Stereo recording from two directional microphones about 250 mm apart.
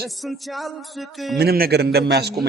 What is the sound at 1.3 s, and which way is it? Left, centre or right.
A man's voice, right.